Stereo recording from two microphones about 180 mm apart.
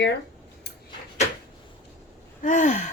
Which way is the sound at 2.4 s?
45° left (ahead or behind).